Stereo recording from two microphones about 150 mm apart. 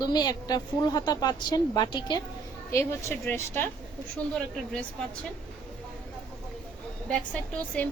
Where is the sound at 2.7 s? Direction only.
20° left (ahead or behind).